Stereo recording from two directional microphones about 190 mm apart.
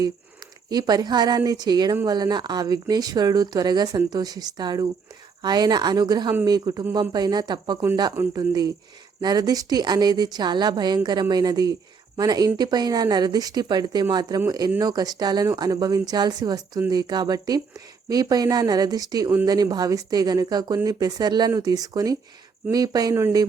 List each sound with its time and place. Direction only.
0.7 s speech: 20° right (ahead or behind)